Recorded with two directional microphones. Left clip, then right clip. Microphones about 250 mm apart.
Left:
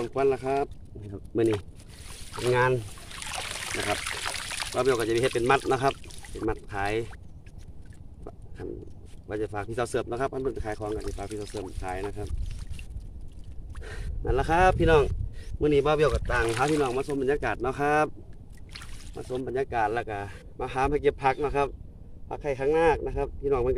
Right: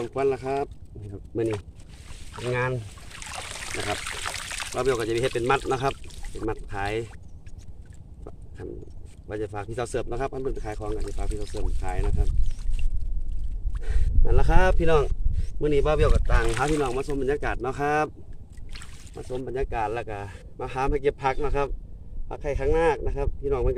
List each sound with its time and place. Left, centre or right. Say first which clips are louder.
0.0 s speech: even; centre
2.3 s speech: left 4 dB; left
3.2 s speech: left 2 dB; centre
8.2 s a sound: even; centre
9.3 s speech: even; centre
13.7 s speech: right 1 dB; centre